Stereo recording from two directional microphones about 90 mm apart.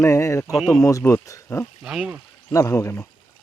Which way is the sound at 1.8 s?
5° right (ahead or behind).